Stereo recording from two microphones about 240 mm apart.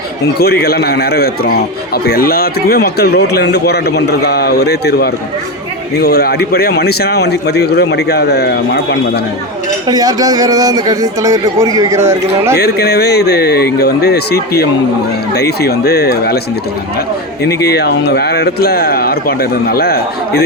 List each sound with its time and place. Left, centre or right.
0.3 s a man's voice: left
9.8 s a man's voice: centre
12.5 s a man's voice: left
17.4 s a man's voice: left